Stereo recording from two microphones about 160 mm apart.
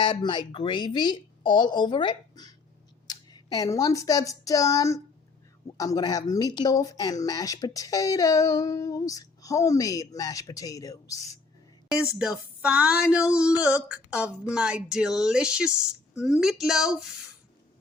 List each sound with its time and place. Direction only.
0.0 s speech: 30° left (ahead or behind)
12.2 s speech: 5° right (ahead or behind)